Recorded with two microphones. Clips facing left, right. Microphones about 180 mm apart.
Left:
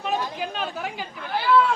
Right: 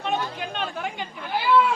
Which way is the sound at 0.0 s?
5° left (ahead or behind).